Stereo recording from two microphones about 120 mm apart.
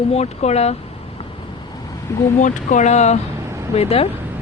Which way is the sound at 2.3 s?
90° left.